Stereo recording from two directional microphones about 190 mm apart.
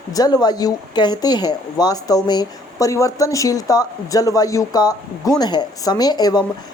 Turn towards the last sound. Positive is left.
turn(degrees=20)  # may be behind; listen again after turning